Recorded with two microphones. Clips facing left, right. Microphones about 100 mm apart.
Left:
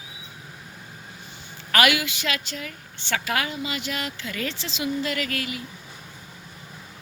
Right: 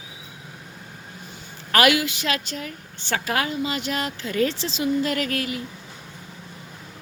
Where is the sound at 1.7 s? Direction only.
35° right (ahead or behind).